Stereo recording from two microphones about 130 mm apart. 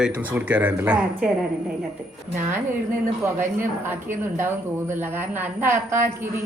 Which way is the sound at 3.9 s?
15° right (ahead or behind).